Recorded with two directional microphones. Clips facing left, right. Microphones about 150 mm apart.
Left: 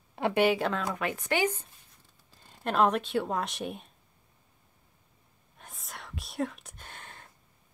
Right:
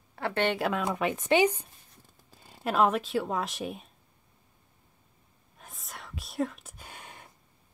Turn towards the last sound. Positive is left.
turn(degrees=-15)  # may be behind; listen again after turning